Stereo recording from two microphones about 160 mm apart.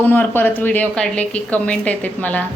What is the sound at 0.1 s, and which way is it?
A woman's voice, 10° left (ahead or behind).